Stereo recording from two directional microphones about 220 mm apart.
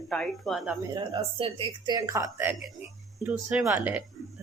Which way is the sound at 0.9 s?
20° right (ahead or behind).